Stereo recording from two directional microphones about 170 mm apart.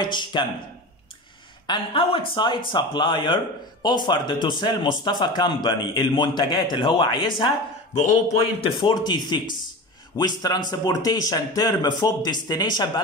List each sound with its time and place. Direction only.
0.0 s speech: 25° left (ahead or behind)
1.7 s speech: 30° left (ahead or behind)
8.6 s speech: 25° left (ahead or behind)